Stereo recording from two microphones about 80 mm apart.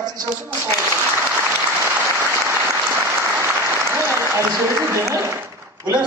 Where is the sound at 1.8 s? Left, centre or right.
Right.